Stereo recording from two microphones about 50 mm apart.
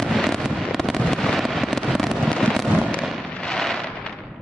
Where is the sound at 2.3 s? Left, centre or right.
Centre.